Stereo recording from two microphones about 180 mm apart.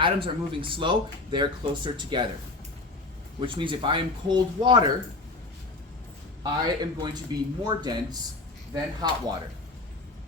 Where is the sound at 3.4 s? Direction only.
30° right (ahead or behind).